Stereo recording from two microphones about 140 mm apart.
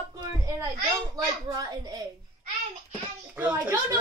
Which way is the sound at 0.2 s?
25° right (ahead or behind).